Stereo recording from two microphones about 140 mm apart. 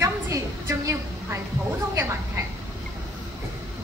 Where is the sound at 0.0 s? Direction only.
20° right (ahead or behind).